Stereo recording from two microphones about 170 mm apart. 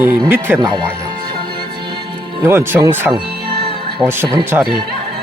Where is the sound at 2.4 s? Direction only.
15° right (ahead or behind).